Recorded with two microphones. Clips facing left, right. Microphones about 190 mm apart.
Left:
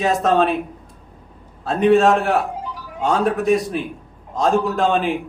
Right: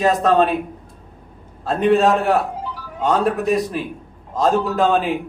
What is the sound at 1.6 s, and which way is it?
A man's voice, centre (ahead or behind).